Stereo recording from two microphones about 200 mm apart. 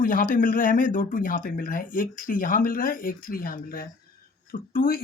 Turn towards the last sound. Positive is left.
turn(degrees=45)  # may be behind; listen again after turning